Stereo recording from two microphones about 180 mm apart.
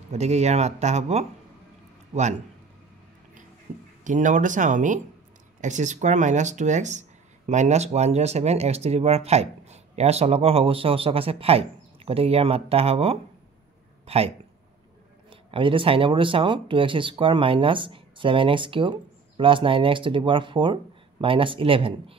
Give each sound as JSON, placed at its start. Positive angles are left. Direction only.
{"t": 0.1, "sound": "speech", "side_deg": -40}
{"t": 4.0, "sound": "speech", "side_deg": -45}